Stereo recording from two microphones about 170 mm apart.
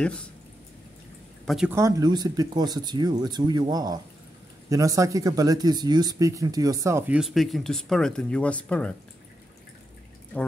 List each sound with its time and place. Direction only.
0.0 s speech: 5° left (ahead or behind)
1.4 s speech: centre (ahead or behind)
1.7 s speech: 15° right (ahead or behind)
7.2 s speech: centre (ahead or behind)